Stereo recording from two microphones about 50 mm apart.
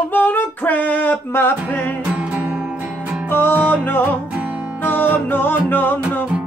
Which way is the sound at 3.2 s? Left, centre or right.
Left.